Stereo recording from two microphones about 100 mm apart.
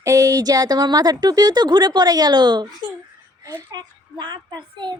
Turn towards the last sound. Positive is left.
turn(degrees=-50)  # may be behind; listen again after turning